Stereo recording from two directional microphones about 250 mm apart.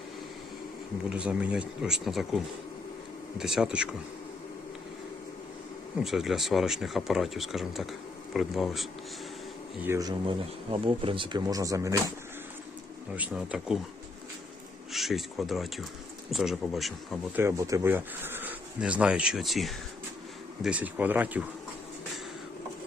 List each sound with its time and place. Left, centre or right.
1.1 s speech: centre
3.3 s speech: centre
6.0 s speech: centre
9.8 s speech: centre
13.1 s speech: centre
14.9 s speech: centre
17.3 s speech: centre